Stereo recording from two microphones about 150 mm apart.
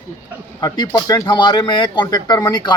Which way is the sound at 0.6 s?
25° left (ahead or behind).